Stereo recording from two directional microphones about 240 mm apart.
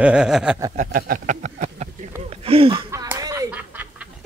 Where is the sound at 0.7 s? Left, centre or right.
Right.